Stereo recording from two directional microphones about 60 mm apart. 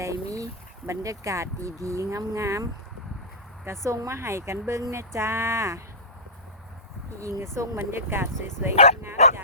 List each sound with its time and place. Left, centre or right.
0.0 s a sound: right
0.9 s speech: right
3.7 s speech: right
4.2 s speech: right
7.2 s speech: right